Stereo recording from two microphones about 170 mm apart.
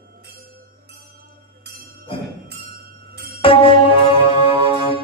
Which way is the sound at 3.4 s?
30° left (ahead or behind).